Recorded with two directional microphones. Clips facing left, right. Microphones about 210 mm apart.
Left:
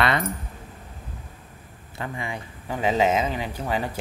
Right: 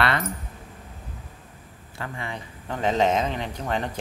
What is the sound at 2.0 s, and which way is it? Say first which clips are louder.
Speech: left 2 dB; 15° left (ahead or behind).